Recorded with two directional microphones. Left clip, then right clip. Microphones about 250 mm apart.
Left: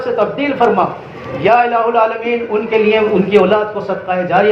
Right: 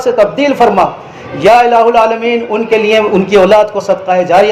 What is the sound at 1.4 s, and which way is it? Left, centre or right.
A man's voice, right.